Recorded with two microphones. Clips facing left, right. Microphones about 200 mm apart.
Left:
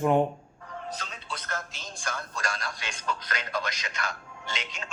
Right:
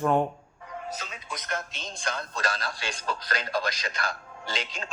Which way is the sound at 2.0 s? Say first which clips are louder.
Right 3 dB; 20° right (ahead or behind).